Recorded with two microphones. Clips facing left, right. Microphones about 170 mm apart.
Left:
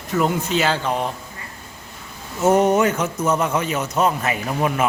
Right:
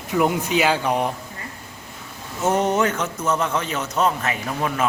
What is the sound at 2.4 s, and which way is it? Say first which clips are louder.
Speech: left 4 dB; 10° left (ahead or behind).